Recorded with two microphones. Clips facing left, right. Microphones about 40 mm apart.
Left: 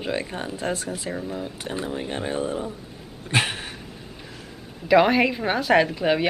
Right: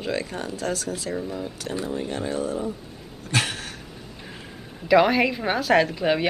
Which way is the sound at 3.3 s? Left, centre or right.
Left.